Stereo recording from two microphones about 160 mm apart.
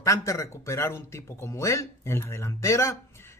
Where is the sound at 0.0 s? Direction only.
20° left (ahead or behind).